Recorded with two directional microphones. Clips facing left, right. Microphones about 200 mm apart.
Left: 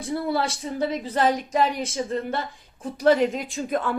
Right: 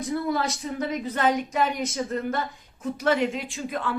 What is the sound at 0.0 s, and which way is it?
A woman's voice, 30° left (ahead or behind).